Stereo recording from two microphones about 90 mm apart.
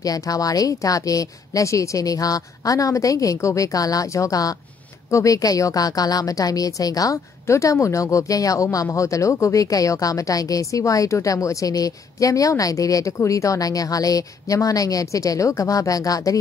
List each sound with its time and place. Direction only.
0.0 s speech: 40° left (ahead or behind)